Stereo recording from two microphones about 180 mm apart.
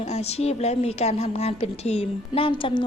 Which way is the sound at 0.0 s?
35° left (ahead or behind).